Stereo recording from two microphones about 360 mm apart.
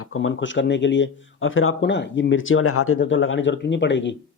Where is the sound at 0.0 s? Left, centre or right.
Left.